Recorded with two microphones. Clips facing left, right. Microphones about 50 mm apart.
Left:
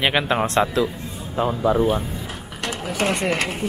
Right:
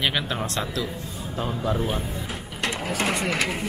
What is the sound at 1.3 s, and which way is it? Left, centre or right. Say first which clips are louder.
Speech: left 7 dB; centre.